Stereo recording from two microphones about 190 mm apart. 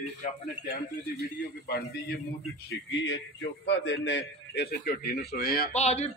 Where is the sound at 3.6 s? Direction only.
70° left (ahead or behind); by 5.7 s 55° left (ahead or behind).